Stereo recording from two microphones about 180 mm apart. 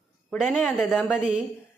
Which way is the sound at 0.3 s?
5° left (ahead or behind).